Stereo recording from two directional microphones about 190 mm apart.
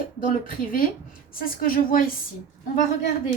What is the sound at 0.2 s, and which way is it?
A woman's voice, 50° left (ahead or behind).